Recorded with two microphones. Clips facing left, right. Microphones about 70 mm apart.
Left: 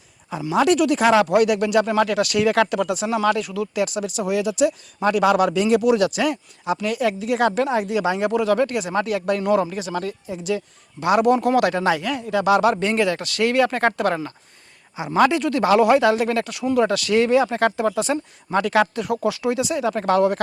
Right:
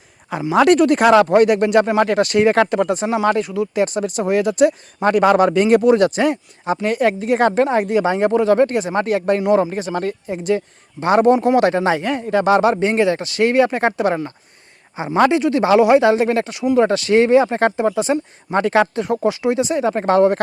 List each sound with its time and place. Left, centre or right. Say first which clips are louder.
0.5 s a man's voice: right 5 dB; right
11.0 s a man's voice: right 4 dB; right
11.3 s a man's voice: right 4 dB; right
14.9 s a man's voice: right 3 dB; right